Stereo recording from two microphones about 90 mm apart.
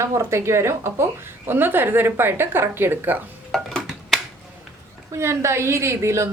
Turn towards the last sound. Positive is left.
turn(degrees=-30)  # may be behind; listen again after turning